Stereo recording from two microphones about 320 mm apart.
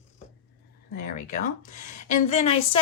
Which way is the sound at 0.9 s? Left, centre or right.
Left.